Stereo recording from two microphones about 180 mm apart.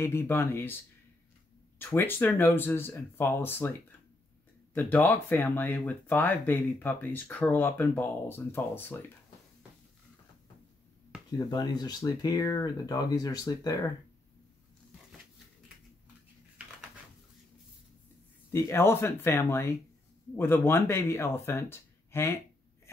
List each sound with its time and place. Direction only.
0.0 s speech: 15° left (ahead or behind)
1.8 s speech: 10° left (ahead or behind)
4.7 s speech: 10° left (ahead or behind)
11.3 s speech: 20° left (ahead or behind)
18.5 s speech: 15° left (ahead or behind)